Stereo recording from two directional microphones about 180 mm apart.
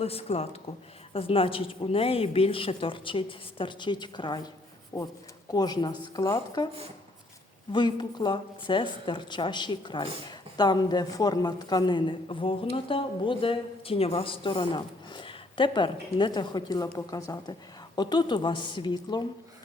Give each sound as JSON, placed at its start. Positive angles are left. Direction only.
{"t": 0.0, "sound": "a man's voice", "side_deg": 35}
{"t": 7.7, "sound": "a man's voice", "side_deg": 25}